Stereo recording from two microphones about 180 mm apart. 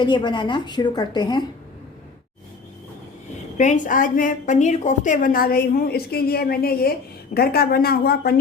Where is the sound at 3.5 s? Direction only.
45° left (ahead or behind).